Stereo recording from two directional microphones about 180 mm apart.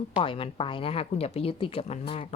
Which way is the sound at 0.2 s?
30° left (ahead or behind).